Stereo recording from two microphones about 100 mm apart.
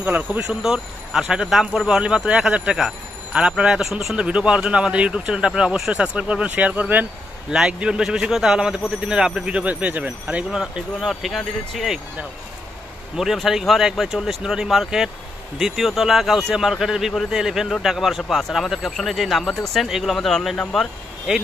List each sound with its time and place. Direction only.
0.0 s speech: 15° right (ahead or behind)
0.5 s speech: 5° right (ahead or behind)
13.1 s speech: 5° right (ahead or behind)